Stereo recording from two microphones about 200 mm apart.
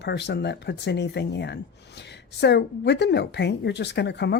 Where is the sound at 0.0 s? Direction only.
60° left (ahead or behind).